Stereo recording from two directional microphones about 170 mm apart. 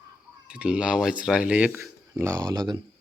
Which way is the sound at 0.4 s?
5° right (ahead or behind).